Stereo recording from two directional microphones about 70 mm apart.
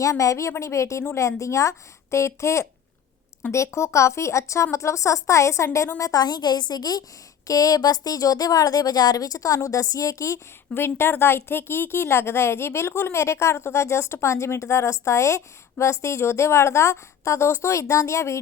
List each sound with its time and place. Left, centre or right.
0.0 s a woman's voice: left
6.0 s a woman's voice: left
10.8 s a woman's voice: left